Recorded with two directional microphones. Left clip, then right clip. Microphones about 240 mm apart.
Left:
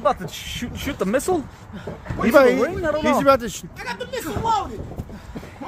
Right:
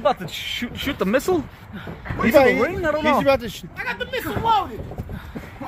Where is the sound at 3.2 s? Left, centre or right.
Centre.